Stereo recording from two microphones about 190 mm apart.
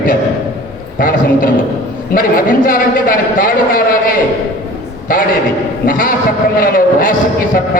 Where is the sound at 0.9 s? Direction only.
50° left (ahead or behind).